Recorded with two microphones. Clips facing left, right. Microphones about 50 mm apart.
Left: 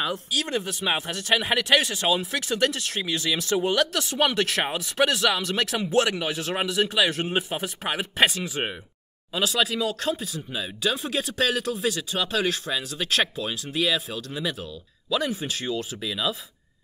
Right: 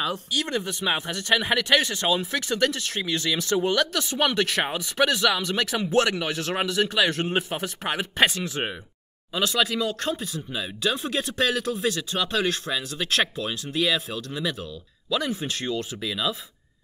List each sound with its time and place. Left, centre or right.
0.1 s speech: centre